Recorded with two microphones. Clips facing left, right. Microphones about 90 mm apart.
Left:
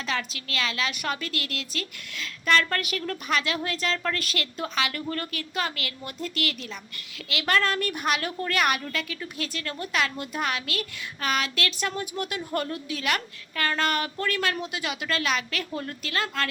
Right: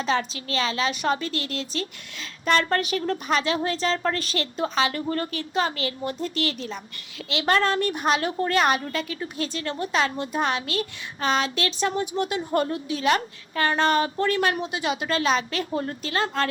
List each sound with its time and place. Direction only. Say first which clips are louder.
0.0 s a woman's voice: right 6 dB; 30° right (ahead or behind)